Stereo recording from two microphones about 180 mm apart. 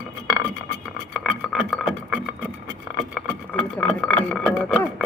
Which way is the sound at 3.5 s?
Centre (ahead or behind).